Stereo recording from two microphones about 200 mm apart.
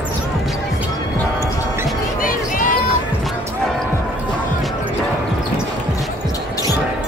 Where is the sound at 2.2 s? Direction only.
45° left (ahead or behind).